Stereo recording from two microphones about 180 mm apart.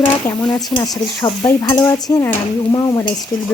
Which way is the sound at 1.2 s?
20° left (ahead or behind).